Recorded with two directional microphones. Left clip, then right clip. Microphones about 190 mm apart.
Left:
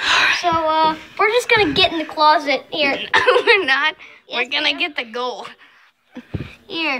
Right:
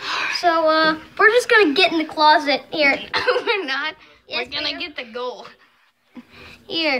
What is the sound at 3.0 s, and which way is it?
Speech, 25° left (ahead or behind).